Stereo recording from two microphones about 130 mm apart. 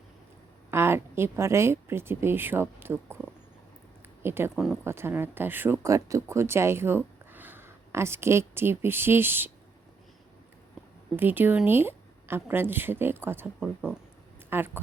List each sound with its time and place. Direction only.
0.7 s speech: 20° right (ahead or behind)
4.2 s speech: 20° right (ahead or behind)
11.2 s speech: 15° right (ahead or behind)
14.5 s speech: 15° right (ahead or behind)